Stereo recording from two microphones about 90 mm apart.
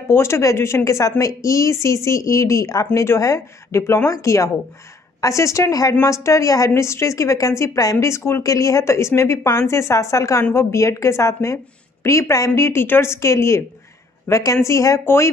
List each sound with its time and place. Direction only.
0.1 s a woman's voice: 30° left (ahead or behind)